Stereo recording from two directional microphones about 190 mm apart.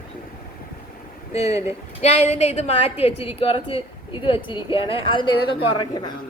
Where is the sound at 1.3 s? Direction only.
35° left (ahead or behind).